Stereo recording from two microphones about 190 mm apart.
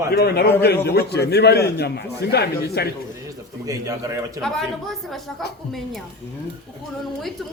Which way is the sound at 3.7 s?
15° right (ahead or behind).